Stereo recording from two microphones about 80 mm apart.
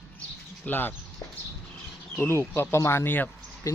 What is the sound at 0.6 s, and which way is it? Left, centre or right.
Speech, left.